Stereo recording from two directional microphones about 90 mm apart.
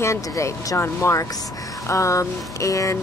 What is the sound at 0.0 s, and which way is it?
Speech, 35° left (ahead or behind).